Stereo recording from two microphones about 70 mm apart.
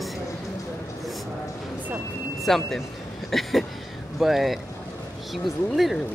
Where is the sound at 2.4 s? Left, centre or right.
Centre.